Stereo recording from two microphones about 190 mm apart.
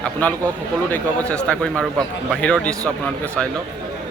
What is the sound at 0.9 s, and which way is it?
A man's voice, 5° left (ahead or behind).